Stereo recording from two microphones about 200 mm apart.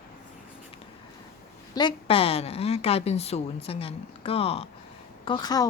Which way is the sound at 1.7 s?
25° left (ahead or behind).